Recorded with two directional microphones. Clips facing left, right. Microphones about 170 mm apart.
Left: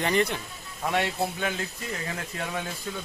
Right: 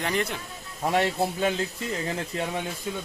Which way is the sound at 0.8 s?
30° right (ahead or behind).